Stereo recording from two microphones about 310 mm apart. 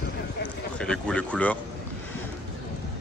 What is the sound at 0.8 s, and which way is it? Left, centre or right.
Speech, centre.